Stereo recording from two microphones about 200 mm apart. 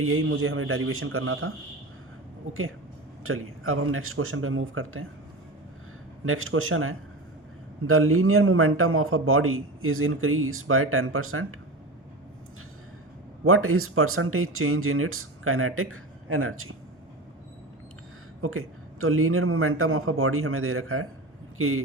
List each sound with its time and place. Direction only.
0.0 s a man's voice: 90° right
6.2 s a man's voice: 90° right
13.4 s a man's voice: 90° right
18.4 s a man's voice: 90° right